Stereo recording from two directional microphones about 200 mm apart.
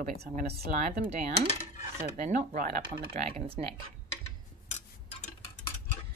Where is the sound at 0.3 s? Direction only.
40° right (ahead or behind).